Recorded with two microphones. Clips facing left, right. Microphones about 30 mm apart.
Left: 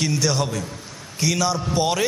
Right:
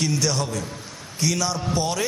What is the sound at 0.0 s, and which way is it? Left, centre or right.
A man's voice, centre.